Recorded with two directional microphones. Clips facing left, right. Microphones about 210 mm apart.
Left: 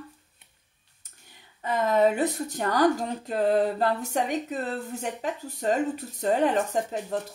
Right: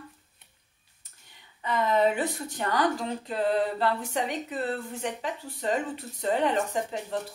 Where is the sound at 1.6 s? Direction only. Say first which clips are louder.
Left 2 dB; 45° left (ahead or behind).